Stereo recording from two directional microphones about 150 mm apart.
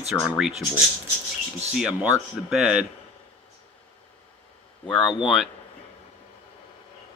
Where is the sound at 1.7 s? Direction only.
5° right (ahead or behind).